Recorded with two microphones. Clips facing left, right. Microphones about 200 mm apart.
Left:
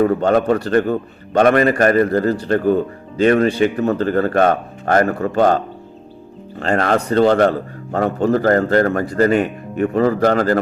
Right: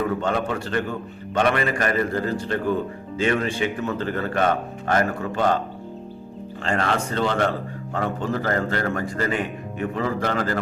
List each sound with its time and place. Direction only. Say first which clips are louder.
0.0 s a man's voice: left 9 dB; 40° left (ahead or behind)
6.6 s a man's voice: left 7 dB; 40° left (ahead or behind)